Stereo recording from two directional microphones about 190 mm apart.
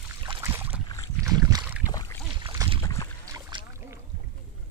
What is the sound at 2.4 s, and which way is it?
Boat, 20° right (ahead or behind).